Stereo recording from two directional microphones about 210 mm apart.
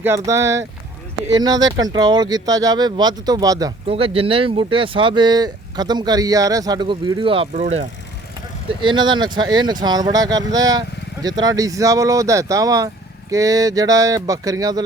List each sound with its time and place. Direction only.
0.0 s speech: 15° right (ahead or behind)
8.8 s speech: 20° right (ahead or behind)